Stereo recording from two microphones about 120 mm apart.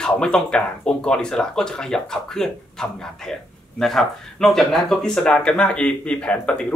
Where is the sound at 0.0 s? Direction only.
5° left (ahead or behind).